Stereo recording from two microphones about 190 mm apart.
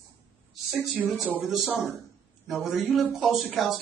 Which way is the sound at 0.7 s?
Centre (ahead or behind).